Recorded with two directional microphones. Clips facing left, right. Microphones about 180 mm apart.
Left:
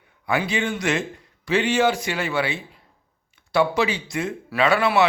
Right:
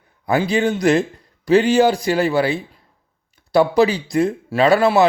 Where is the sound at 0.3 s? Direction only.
35° right (ahead or behind).